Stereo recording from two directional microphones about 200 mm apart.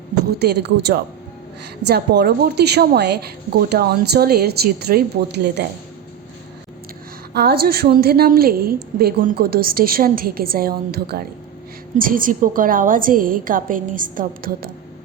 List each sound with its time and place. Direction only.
0.3 s a woman's voice: 55° right (ahead or behind)
7.3 s a woman's voice: 50° right (ahead or behind)